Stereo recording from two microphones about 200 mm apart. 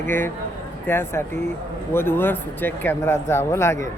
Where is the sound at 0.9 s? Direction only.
10° left (ahead or behind).